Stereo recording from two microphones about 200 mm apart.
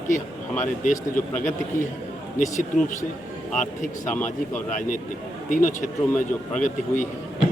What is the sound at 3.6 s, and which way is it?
Speech, 40° left (ahead or behind).